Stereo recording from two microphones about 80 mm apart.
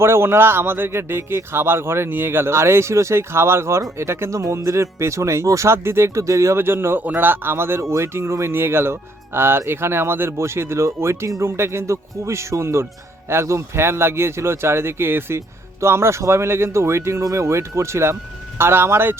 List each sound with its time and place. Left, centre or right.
0.0 s speech: right